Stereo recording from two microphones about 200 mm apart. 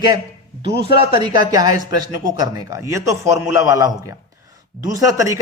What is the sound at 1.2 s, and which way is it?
Speech, 20° right (ahead or behind).